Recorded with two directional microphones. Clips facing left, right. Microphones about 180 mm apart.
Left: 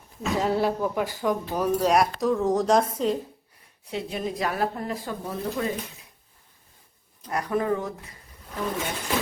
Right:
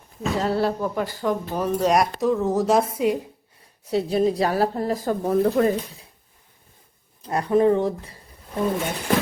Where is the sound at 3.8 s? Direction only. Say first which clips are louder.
Right 10 dB; 35° right (ahead or behind); by 5.7 s 55° right (ahead or behind).